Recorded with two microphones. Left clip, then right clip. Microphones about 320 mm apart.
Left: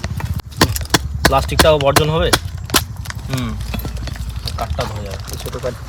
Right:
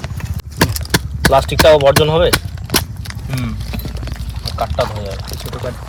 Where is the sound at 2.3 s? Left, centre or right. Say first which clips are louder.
Left 1 dB; left.